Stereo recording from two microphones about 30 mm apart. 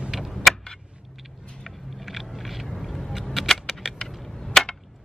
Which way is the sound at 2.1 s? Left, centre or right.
Centre.